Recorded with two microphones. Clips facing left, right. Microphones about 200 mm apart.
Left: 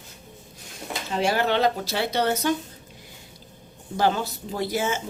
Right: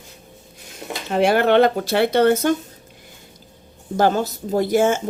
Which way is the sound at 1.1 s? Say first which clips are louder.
Right 8 dB; 60° right (ahead or behind).